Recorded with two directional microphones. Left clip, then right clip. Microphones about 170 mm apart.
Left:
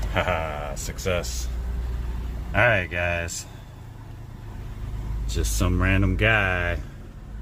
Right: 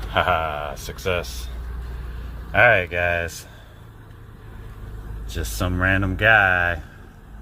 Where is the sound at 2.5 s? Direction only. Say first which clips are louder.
Right 5 dB; 10° right (ahead or behind).